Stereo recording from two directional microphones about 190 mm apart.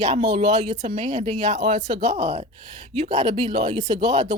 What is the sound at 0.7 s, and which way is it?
Speech, 35° right (ahead or behind).